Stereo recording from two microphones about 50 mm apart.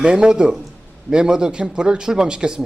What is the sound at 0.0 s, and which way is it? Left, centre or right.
A man's voice, centre.